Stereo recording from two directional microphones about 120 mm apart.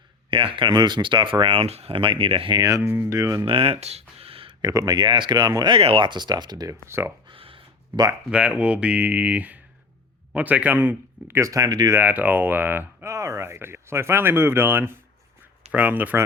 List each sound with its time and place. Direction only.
0.3 s speech: 45° right (ahead or behind)
2.6 s speech: 30° right (ahead or behind)
2.8 s speech: 15° right (ahead or behind)
3.4 s speech: 50° right (ahead or behind)
4.6 s speech: 35° right (ahead or behind)
5.7 s speech: 50° right (ahead or behind); by 7.1 s 20° right (ahead or behind)
7.3 s a sound: 50° right (ahead or behind)
8.3 s speech: 10° right (ahead or behind); by 11.9 s 30° right (ahead or behind)
11.9 s speech: 15° right (ahead or behind)